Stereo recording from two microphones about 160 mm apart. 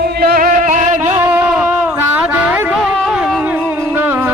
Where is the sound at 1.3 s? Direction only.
15° right (ahead or behind).